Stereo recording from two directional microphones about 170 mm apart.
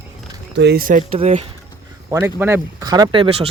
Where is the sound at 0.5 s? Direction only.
70° right (ahead or behind); by 1.0 s 55° right (ahead or behind).